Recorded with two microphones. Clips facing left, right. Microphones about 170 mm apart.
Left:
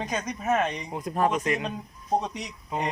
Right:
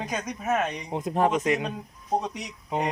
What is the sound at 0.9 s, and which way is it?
Speech, 25° right (ahead or behind).